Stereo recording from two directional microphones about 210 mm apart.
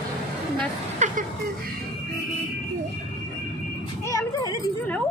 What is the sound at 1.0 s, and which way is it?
Speech, 35° right (ahead or behind).